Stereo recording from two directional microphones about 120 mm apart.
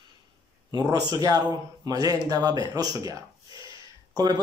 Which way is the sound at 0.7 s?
30° right (ahead or behind).